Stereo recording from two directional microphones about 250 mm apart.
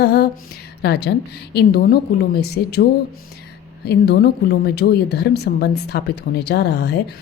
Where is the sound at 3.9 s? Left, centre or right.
Left.